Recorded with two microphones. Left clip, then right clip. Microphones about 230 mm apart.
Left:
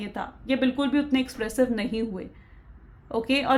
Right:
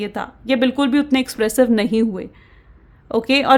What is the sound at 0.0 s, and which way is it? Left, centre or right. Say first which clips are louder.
A woman's voice: right 8 dB; right.